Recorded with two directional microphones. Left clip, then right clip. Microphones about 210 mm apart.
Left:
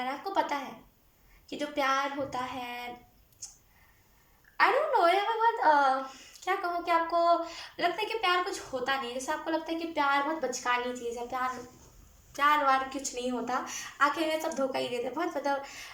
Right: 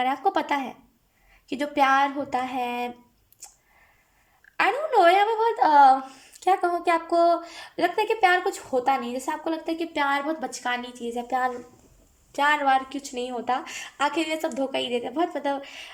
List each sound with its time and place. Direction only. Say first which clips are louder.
0.0 s a sound: right 7 dB; 50° right (ahead or behind)
1.5 s speech: right 8 dB; 55° right (ahead or behind)
4.5 s a woman's voice: right 4 dB; 45° right (ahead or behind)
12.4 s a woman's voice: right 4 dB; 45° right (ahead or behind)